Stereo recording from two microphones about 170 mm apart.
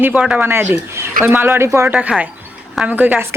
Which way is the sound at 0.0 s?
10° right (ahead or behind).